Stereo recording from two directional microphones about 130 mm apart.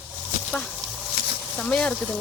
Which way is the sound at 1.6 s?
5° left (ahead or behind).